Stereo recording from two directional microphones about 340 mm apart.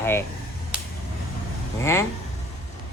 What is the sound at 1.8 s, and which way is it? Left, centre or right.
Speech, centre.